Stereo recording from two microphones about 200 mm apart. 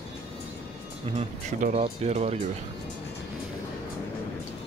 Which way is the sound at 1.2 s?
35° right (ahead or behind).